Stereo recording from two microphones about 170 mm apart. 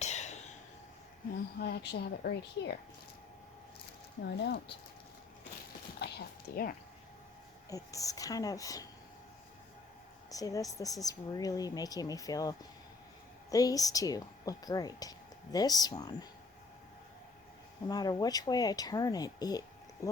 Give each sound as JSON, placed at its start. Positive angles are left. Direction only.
{"t": 0.0, "sound": "a sound", "side_deg": 45}
{"t": 1.5, "sound": "speech", "side_deg": 75}
{"t": 4.2, "sound": "speech", "side_deg": 75}
{"t": 6.0, "sound": "a sound", "side_deg": 75}
{"t": 7.7, "sound": "speech", "side_deg": 20}
{"t": 10.2, "sound": "speech", "side_deg": 20}
{"t": 17.8, "sound": "speech", "side_deg": 25}